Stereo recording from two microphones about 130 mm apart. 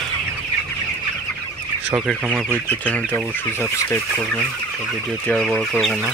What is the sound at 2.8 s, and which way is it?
Speech, 10° left (ahead or behind).